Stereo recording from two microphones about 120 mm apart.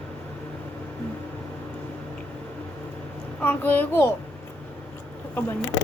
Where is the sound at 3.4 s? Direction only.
15° left (ahead or behind).